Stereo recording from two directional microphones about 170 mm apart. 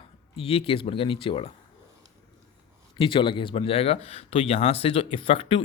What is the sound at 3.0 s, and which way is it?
Speech, 30° left (ahead or behind).